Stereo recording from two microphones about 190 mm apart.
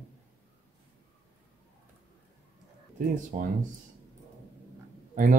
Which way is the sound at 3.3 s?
45° right (ahead or behind).